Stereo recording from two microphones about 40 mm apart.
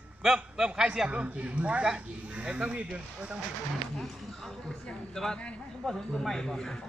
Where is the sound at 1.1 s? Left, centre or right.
Right.